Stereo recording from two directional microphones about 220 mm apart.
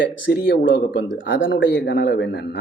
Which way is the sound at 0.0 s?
55° left (ahead or behind).